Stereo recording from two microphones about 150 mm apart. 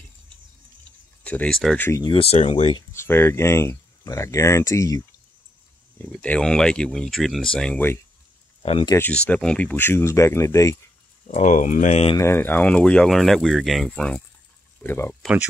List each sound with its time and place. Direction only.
1.2 s speech: 10° left (ahead or behind)
1.8 s speech: 20° left (ahead or behind)
2.0 s speech: 40° left (ahead or behind)
2.9 s speech: 15° left (ahead or behind)
5.9 s speech: 10° left (ahead or behind)
11.2 s speech: 50° left (ahead or behind)
12.2 s speech: 15° left (ahead or behind)